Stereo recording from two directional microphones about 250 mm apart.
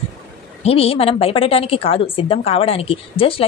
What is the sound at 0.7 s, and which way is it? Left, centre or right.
A woman's voice, left.